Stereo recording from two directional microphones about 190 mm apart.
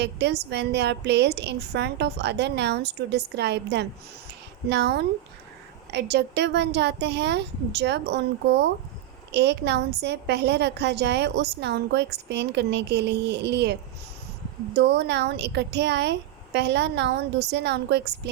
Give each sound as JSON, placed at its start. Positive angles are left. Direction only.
{"t": 0.0, "sound": "a woman's voice", "side_deg": -60}
{"t": 14.8, "sound": "a woman's voice", "side_deg": -65}